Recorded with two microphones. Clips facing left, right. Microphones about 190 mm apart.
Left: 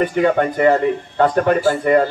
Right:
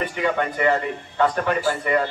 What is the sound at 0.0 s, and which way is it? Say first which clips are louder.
A man's voice: left 8 dB; 45° left (ahead or behind).